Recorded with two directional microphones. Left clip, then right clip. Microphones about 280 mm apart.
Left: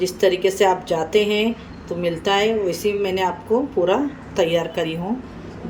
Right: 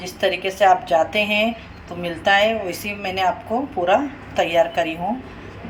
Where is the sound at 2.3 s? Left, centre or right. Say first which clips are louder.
Right 2 dB; centre.